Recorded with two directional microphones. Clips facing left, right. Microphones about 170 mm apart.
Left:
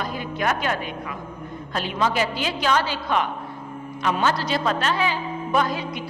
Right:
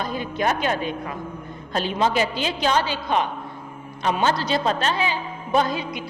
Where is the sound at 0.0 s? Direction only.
25° right (ahead or behind).